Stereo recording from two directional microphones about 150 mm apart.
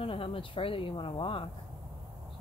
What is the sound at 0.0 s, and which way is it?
Speech, 40° left (ahead or behind).